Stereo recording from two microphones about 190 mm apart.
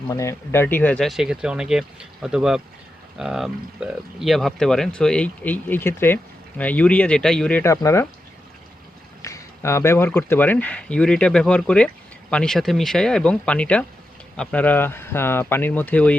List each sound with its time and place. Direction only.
0.1 s speech: 15° left (ahead or behind)
9.2 s speech: 15° left (ahead or behind)